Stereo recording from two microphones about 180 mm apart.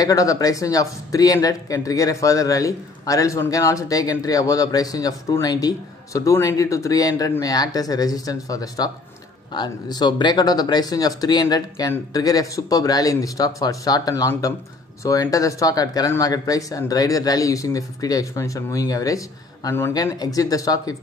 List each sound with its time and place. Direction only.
0.0 s speech: 20° left (ahead or behind)